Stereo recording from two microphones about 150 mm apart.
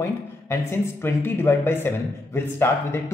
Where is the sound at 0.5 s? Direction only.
15° left (ahead or behind).